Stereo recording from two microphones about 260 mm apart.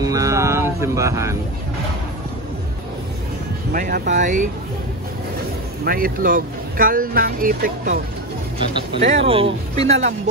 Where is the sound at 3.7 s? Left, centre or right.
Right.